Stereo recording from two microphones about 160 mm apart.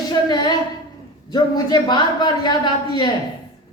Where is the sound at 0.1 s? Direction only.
25° left (ahead or behind).